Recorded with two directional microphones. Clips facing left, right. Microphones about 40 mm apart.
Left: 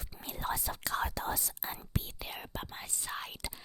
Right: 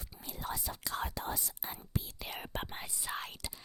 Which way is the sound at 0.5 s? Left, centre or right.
Left.